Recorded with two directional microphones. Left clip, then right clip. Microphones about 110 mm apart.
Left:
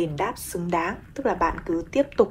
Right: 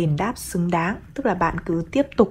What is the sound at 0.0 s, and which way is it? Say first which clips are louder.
Speech: right 1 dB; 25° right (ahead or behind).